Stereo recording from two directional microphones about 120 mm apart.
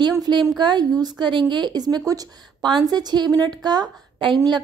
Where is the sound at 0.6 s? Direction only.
35° right (ahead or behind).